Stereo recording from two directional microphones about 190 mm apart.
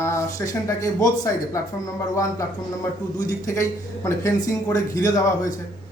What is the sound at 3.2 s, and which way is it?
Speech, 20° left (ahead or behind).